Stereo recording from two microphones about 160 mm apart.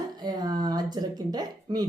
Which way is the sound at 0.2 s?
25° right (ahead or behind).